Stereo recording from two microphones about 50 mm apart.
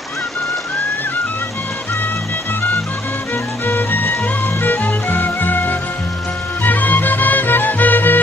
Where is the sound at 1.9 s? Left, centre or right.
Left.